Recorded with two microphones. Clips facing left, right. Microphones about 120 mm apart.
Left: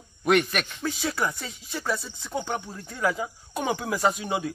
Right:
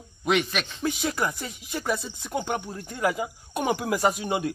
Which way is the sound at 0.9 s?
15° right (ahead or behind).